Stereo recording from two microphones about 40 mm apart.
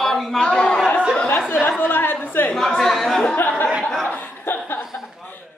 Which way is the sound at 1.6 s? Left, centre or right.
Left.